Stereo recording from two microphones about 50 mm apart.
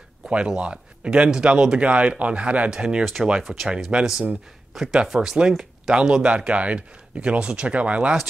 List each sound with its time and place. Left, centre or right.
0.3 s speech: right